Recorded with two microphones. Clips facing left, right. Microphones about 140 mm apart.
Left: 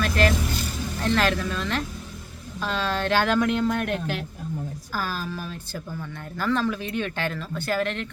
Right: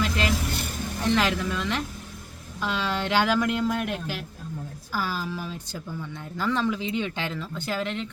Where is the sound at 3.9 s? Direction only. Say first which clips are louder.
Left 4 dB; 60° left (ahead or behind).